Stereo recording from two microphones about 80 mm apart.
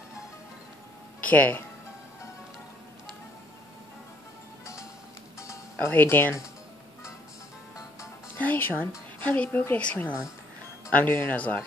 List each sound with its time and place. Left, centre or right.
1.2 s speech: centre
5.8 s speech: left
8.4 s speech: left